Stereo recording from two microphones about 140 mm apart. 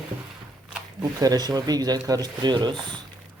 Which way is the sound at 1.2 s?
25° right (ahead or behind).